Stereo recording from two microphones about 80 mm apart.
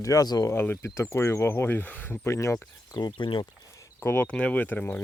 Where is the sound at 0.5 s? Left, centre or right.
Left.